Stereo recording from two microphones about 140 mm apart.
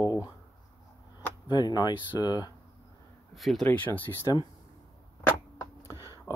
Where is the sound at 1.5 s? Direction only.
30° left (ahead or behind).